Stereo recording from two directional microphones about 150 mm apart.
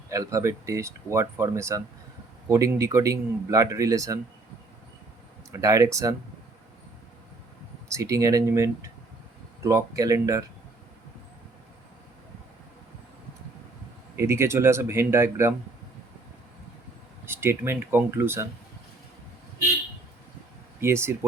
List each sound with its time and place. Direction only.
0.1 s speech: 20° right (ahead or behind)
5.5 s speech: 20° right (ahead or behind)
7.9 s speech: 20° right (ahead or behind)
14.2 s speech: 15° right (ahead or behind)
17.2 s speech: 15° right (ahead or behind)
20.8 s speech: 15° right (ahead or behind)